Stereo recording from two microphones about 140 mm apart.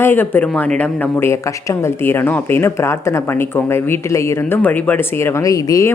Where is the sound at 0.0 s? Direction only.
15° left (ahead or behind).